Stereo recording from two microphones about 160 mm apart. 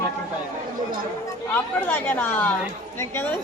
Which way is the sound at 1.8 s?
10° left (ahead or behind).